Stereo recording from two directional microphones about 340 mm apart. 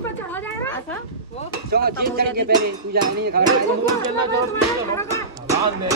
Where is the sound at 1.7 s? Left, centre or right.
Right.